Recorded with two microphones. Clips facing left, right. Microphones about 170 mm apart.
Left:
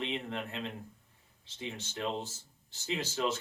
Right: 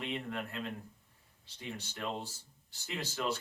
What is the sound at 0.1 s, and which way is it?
Speech, 25° left (ahead or behind).